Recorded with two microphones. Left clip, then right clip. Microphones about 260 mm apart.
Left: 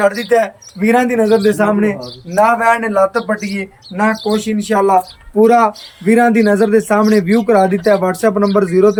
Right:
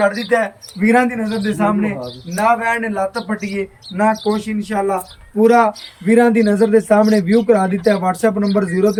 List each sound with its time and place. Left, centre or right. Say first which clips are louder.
0.0 s speech: left 3 dB; left; by 8.9 s centre